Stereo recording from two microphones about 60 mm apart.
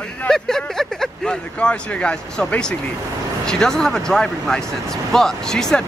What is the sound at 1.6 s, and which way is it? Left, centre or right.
Speech, centre.